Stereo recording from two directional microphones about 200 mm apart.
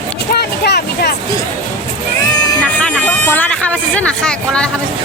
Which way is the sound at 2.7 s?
5° left (ahead or behind).